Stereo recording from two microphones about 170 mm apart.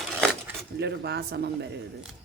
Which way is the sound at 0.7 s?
75° right (ahead or behind).